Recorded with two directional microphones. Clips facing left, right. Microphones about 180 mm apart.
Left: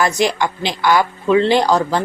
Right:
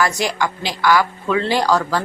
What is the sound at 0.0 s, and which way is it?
Speech, 20° left (ahead or behind).